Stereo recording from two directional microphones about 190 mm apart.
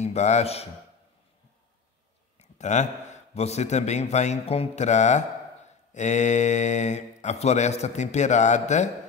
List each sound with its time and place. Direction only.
0.0 s a man's voice: 35° left (ahead or behind)
2.3 s a man's voice: 40° left (ahead or behind)